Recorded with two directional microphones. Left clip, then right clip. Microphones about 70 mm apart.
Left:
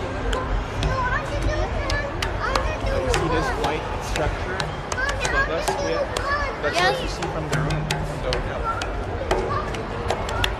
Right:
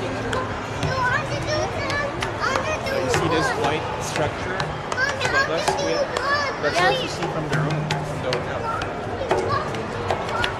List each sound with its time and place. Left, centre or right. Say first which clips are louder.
6.7 s speech: right 1 dB; left
7.5 s music: right 1 dB; left